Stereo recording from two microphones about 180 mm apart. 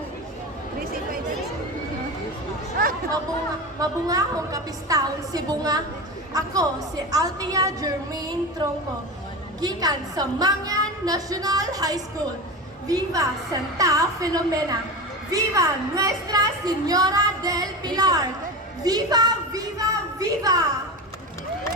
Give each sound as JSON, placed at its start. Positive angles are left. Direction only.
{"t": 3.8, "sound": "a woman's voice", "side_deg": -20}